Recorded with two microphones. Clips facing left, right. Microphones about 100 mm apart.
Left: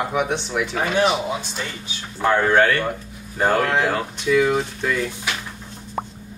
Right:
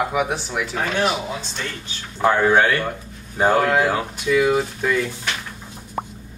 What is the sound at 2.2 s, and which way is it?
Speech, 15° right (ahead or behind).